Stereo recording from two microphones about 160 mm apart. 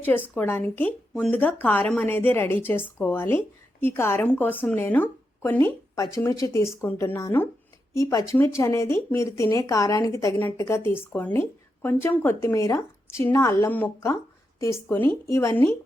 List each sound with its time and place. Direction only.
0.3 s a woman's voice: 10° left (ahead or behind)
8.5 s a woman's voice: 20° left (ahead or behind)